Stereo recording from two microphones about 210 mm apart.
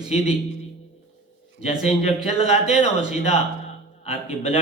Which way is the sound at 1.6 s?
30° left (ahead or behind).